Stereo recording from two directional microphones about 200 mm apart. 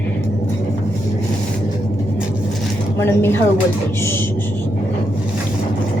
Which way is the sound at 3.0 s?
10° left (ahead or behind).